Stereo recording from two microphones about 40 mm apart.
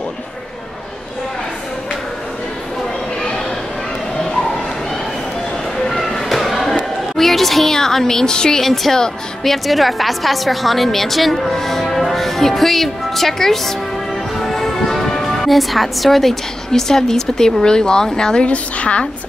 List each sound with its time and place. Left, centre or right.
5.9 s a sound: centre
8.8 s a woman's voice: centre
18.5 s speech: left